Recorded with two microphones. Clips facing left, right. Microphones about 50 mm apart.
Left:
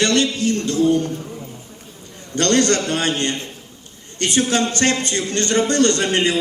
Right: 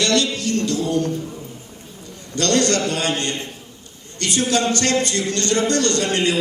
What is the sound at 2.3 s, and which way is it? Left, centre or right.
A man's voice, left.